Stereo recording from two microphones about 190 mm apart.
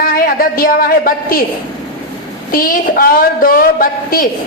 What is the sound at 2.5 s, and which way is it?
A woman's voice, 50° left (ahead or behind).